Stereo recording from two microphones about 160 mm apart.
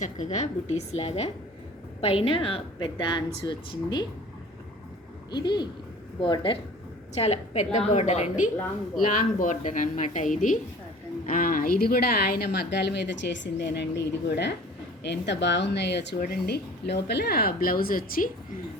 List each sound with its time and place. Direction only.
0.0 s a woman's voice: 45° left (ahead or behind); by 4.0 s 30° left (ahead or behind)
5.3 s a woman's voice: 30° left (ahead or behind)
7.2 s a woman's voice: 45° left (ahead or behind)
9.0 s a woman's voice: 55° left (ahead or behind)